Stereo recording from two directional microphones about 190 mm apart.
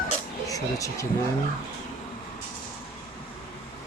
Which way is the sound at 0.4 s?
15° left (ahead or behind).